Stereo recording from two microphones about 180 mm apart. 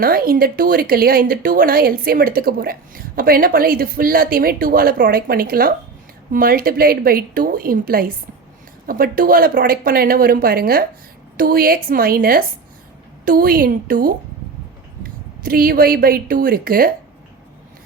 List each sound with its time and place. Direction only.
0.0 s a woman's voice: 55° right (ahead or behind)